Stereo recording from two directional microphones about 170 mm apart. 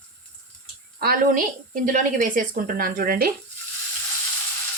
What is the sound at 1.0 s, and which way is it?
Speech, 65° right (ahead or behind).